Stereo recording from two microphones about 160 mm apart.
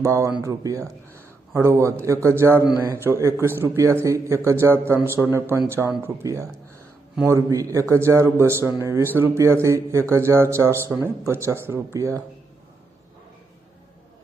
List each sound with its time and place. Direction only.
0.0 s a man's voice: 20° right (ahead or behind)